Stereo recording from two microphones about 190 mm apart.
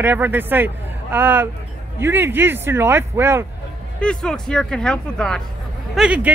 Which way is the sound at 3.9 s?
5° left (ahead or behind).